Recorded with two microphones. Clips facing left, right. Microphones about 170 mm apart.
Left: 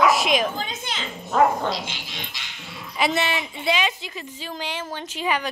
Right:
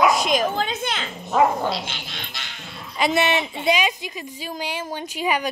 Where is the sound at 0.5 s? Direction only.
60° right (ahead or behind).